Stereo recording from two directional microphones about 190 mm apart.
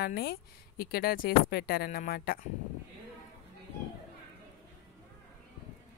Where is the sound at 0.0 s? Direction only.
55° left (ahead or behind).